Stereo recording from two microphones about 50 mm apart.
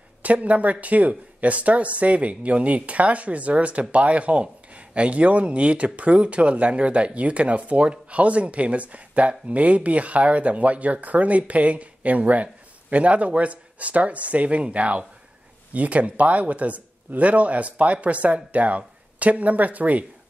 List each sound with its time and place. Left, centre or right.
0.2 s speech: right